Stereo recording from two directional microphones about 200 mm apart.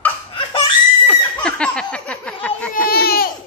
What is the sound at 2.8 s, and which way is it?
Laughter, 50° left (ahead or behind).